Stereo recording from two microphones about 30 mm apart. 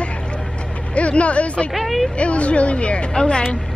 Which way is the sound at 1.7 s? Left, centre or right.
Centre.